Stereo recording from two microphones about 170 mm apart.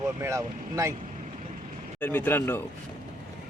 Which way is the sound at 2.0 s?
10° left (ahead or behind).